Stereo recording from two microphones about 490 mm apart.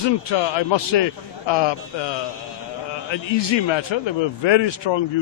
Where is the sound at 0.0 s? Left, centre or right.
Left.